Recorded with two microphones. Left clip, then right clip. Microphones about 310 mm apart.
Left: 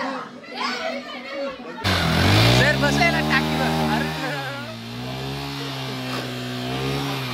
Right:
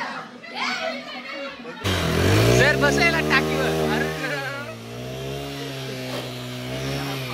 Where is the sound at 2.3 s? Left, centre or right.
Centre.